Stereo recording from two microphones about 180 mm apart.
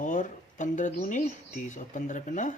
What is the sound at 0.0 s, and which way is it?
Speech, 45° left (ahead or behind).